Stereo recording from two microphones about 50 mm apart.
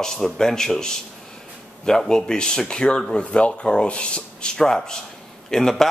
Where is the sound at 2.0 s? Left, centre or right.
Centre.